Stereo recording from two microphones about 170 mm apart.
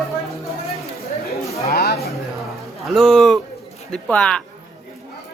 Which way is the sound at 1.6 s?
65° left (ahead or behind).